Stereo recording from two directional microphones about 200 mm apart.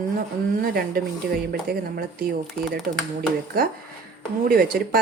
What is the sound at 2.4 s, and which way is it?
Speech, centre (ahead or behind).